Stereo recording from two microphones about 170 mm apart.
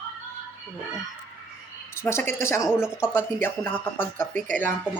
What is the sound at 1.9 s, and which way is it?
Speech, 15° left (ahead or behind).